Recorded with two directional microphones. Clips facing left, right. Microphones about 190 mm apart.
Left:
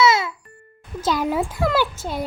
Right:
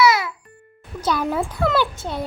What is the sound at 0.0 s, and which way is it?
Music, 25° left (ahead or behind).